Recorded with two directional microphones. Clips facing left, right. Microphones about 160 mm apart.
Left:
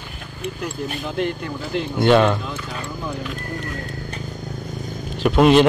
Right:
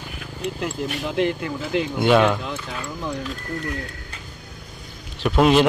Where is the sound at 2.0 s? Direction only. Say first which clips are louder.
Left 2 dB; 5° right (ahead or behind).